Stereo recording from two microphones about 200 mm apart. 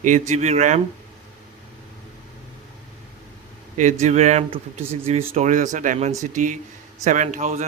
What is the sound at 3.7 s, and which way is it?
Speech, 35° right (ahead or behind).